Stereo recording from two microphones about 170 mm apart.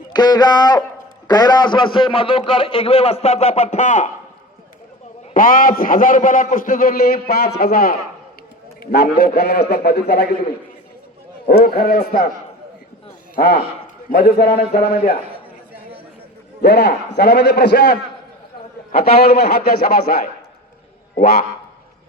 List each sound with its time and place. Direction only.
0.1 s a man's voice: 25° left (ahead or behind); by 4.1 s 45° left (ahead or behind)
5.3 s a man's voice: 55° left (ahead or behind); by 10.2 s 75° left (ahead or behind)
11.4 s a man's voice: 60° left (ahead or behind)
14.1 s a man's voice: 65° left (ahead or behind)
16.6 s a man's voice: 75° left (ahead or behind)